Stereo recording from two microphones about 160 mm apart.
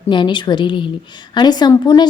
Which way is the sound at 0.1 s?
30° left (ahead or behind).